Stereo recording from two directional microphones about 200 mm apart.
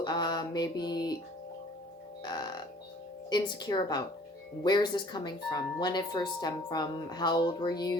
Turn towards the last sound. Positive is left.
turn(degrees=20)  # may be behind; listen again after turning